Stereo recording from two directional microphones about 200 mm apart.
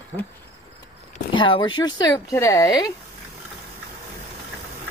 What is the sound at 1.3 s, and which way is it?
Speech, 25° left (ahead or behind).